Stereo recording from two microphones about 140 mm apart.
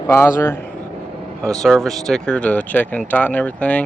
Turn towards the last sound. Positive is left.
turn(degrees=10)  # may be behind; listen again after turning